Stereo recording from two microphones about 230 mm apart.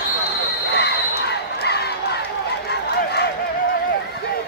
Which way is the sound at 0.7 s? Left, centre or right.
Left.